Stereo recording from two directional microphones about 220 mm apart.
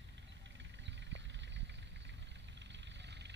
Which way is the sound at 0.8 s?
55° right (ahead or behind).